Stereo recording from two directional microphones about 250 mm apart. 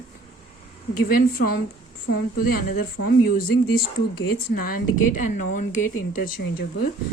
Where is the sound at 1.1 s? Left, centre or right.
Left.